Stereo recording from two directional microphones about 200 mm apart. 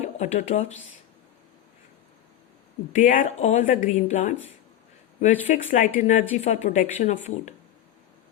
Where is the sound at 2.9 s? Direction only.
40° left (ahead or behind).